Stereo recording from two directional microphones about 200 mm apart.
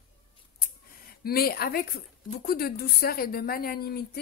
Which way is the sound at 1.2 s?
50° left (ahead or behind).